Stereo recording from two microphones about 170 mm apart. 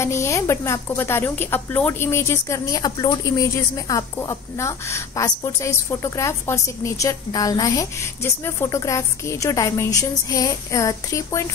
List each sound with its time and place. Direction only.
0.0 s a woman's voice: 15° left (ahead or behind)